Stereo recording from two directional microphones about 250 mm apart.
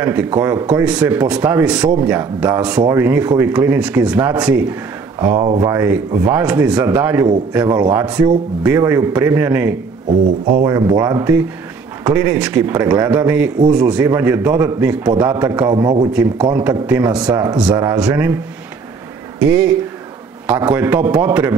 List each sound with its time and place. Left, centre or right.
0.0 s a man's voice: centre
5.2 s a man's voice: centre
10.2 s speech: right
10.6 s a man's voice: centre
15.7 s a man's voice: centre
16.5 s a man's voice: centre
19.4 s a man's voice: centre